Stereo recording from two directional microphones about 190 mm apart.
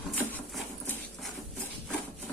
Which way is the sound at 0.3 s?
5° left (ahead or behind).